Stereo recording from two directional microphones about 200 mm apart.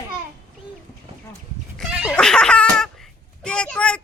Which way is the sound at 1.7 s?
Centre (ahead or behind).